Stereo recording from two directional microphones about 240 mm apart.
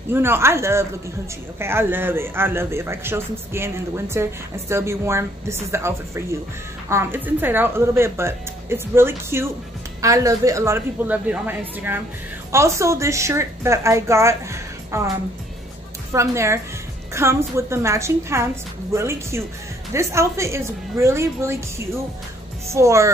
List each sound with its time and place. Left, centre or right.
0.1 s a man's voice: centre
16.1 s a man's voice: centre